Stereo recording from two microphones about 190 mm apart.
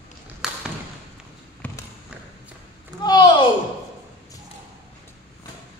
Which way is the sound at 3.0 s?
20° left (ahead or behind).